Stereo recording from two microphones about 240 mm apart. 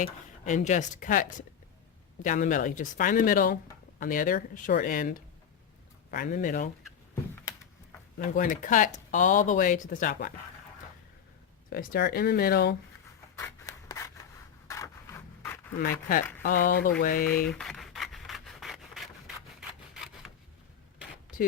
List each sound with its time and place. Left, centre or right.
0.0 s speech: left
8.3 s speech: left
11.7 s speech: left
13.3 s rub: centre
14.7 s a sound: centre
15.8 s speech: left
17.4 s rub: centre
19.5 s a sound: centre